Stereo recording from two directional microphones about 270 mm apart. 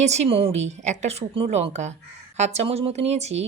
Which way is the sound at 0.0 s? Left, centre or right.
Right.